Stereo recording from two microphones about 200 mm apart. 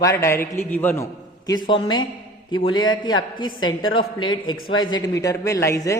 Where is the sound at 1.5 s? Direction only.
20° left (ahead or behind).